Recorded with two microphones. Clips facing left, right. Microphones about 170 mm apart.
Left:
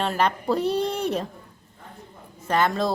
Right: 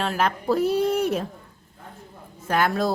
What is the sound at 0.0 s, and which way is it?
A woman's voice, 5° right (ahead or behind).